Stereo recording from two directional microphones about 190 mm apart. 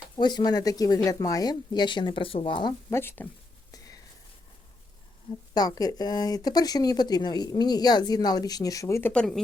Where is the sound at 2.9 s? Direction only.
10° left (ahead or behind).